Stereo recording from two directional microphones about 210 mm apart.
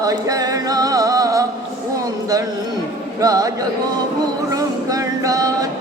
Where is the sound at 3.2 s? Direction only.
15° right (ahead or behind).